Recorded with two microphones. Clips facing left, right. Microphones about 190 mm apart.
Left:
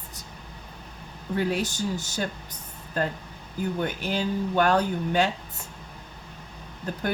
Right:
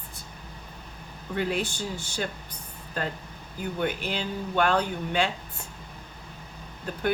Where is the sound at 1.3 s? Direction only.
40° left (ahead or behind).